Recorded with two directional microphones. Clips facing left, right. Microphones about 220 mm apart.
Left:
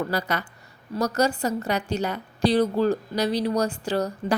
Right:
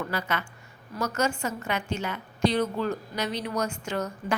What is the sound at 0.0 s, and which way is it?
A woman's voice, 35° left (ahead or behind).